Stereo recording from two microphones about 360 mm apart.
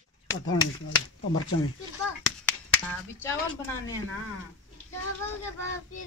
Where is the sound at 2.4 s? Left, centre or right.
Centre.